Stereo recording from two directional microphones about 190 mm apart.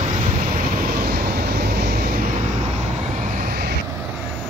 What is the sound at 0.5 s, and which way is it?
Vehicle, 55° right (ahead or behind).